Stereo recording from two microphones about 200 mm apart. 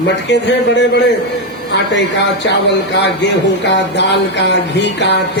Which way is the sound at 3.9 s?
60° left (ahead or behind).